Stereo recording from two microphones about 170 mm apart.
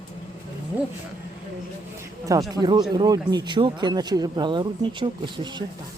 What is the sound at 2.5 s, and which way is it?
Speech, 25° right (ahead or behind).